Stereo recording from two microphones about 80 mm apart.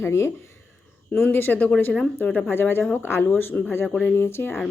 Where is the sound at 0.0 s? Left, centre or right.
Left; by 2.4 s centre.